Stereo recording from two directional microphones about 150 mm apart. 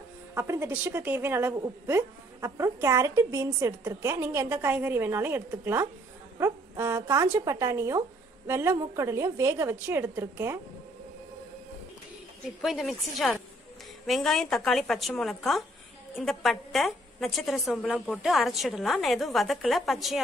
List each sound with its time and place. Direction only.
0.3 s a woman's voice: 15° right (ahead or behind)
12.6 s a woman's voice: centre (ahead or behind)